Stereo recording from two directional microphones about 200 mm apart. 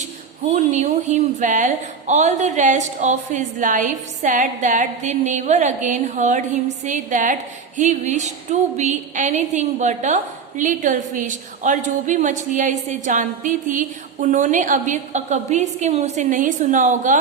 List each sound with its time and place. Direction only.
0.5 s speech: 35° right (ahead or behind)